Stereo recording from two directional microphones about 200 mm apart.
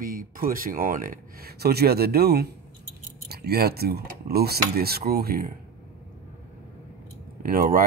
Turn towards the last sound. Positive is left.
turn(degrees=-45)  # may be behind; listen again after turning